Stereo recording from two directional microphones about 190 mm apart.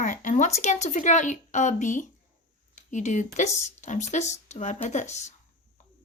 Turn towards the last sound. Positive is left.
turn(degrees=35)  # may be behind; listen again after turning